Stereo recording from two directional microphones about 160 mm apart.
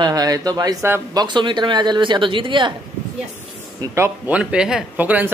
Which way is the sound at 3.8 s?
15° right (ahead or behind).